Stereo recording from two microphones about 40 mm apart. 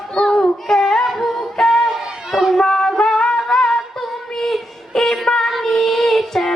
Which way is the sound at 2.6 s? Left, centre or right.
Centre.